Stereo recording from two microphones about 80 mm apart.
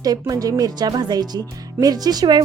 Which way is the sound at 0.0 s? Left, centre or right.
Right.